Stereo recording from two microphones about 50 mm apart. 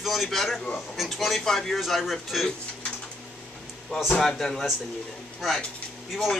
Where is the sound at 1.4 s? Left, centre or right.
Centre.